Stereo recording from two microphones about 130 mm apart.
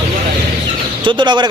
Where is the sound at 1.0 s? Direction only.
35° right (ahead or behind).